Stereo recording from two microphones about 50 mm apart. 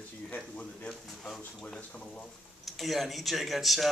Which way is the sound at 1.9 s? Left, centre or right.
Left.